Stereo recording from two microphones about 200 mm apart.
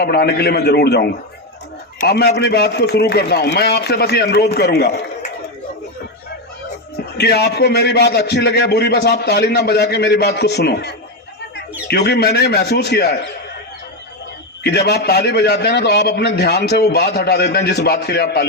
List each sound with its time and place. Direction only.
0.0 s a man's voice: 50° left (ahead or behind)
7.2 s a man's voice: 55° left (ahead or behind)
14.6 s a man's voice: 55° left (ahead or behind)